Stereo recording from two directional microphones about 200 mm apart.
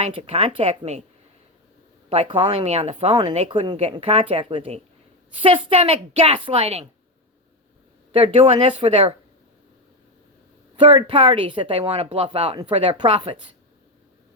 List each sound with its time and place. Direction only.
0.0 s speech: 30° right (ahead or behind)
2.0 s speech: 30° right (ahead or behind)
8.1 s speech: 25° right (ahead or behind)
10.8 s speech: 25° right (ahead or behind)